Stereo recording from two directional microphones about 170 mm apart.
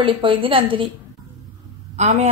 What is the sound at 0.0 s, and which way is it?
Speech, 30° right (ahead or behind).